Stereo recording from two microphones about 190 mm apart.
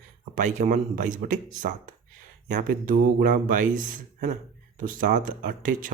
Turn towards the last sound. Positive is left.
turn(degrees=-45)  # may be behind; listen again after turning